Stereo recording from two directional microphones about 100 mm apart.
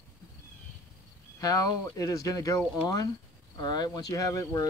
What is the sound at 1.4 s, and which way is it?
Speech, 35° left (ahead or behind).